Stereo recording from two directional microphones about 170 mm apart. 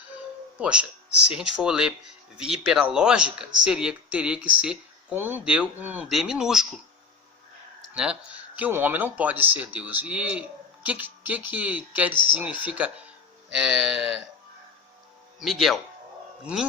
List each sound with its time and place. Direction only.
0.6 s speech: 5° right (ahead or behind)
7.9 s speech: 5° right (ahead or behind)
15.4 s speech: centre (ahead or behind)